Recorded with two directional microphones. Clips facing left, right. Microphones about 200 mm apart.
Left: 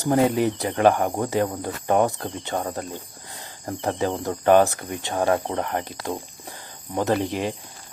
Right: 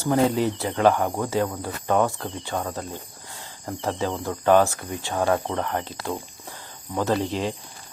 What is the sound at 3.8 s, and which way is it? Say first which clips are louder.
Speech: left 2 dB; 15° left (ahead or behind).